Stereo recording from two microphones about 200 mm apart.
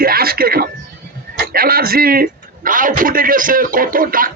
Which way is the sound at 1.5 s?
50° right (ahead or behind).